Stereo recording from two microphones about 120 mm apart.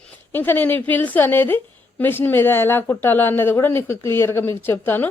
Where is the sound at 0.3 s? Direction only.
15° left (ahead or behind).